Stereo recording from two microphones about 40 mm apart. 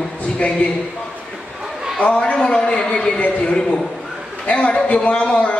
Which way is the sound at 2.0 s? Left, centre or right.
Left.